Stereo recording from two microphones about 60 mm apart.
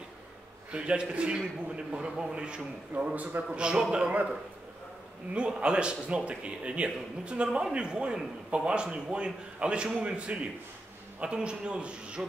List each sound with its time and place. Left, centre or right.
0.7 s a man's voice: centre
5.3 s a man's voice: centre